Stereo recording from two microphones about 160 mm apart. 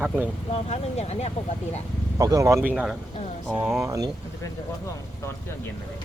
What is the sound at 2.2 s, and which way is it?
Speech, 20° right (ahead or behind).